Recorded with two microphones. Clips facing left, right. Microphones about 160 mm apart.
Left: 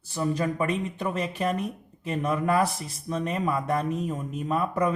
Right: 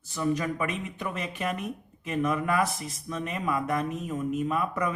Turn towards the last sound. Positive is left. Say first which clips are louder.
# left 2 dB
turn(degrees=30)  # may be behind; listen again after turning